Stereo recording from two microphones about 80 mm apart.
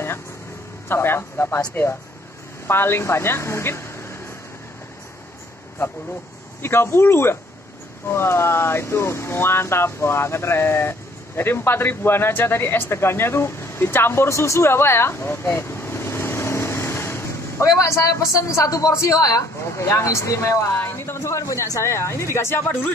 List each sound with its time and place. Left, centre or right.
0.8 s a man's voice: left
2.6 s speech: left
6.6 s speech: left